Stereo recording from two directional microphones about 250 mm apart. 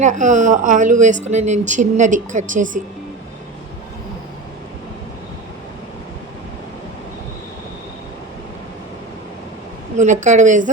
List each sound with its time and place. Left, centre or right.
0.0 s speech: right
10.0 s speech: right